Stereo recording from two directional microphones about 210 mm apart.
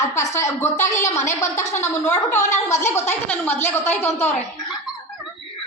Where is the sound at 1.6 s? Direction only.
35° left (ahead or behind).